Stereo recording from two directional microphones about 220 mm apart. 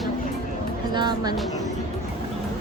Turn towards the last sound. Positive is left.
turn(degrees=-20)  # may be behind; listen again after turning